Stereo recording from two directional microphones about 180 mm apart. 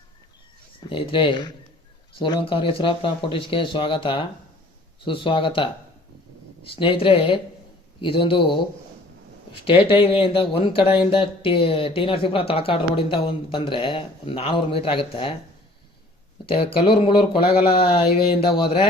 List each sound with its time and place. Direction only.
0.9 s speech: 30° left (ahead or behind)
9.6 s speech: 30° left (ahead or behind)
16.5 s speech: 30° left (ahead or behind)